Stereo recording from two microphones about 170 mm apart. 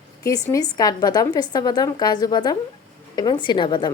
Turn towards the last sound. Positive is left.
turn(degrees=25)  # may be behind; listen again after turning